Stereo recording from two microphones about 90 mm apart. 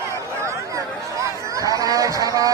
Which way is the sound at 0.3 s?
35° right (ahead or behind).